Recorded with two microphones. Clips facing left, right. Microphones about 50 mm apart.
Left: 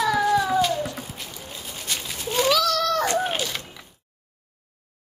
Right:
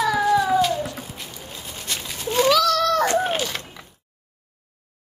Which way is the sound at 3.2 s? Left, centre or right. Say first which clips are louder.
Right 2 dB; centre.